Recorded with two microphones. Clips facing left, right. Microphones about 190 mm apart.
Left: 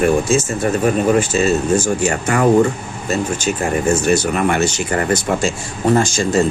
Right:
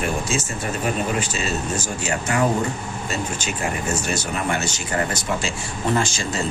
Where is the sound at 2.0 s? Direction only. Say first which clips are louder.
Left 6 dB; 55° left (ahead or behind).